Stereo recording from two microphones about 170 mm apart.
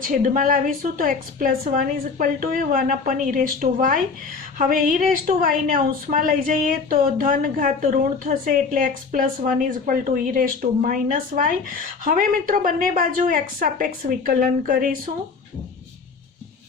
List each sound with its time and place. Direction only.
0.0 s a woman's voice: 50° right (ahead or behind)